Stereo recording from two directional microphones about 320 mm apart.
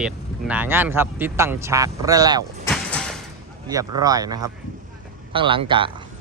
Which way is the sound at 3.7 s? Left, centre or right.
Centre.